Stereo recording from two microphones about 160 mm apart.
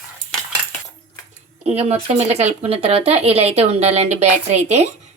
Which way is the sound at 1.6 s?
40° right (ahead or behind).